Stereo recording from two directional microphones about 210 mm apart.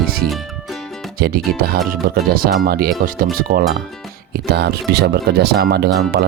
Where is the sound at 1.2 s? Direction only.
45° right (ahead or behind).